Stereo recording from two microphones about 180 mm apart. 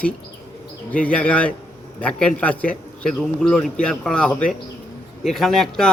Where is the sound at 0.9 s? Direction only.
5° left (ahead or behind).